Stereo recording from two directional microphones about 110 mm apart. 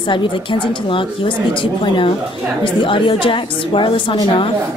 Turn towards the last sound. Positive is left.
turn(degrees=45)  # may be behind; listen again after turning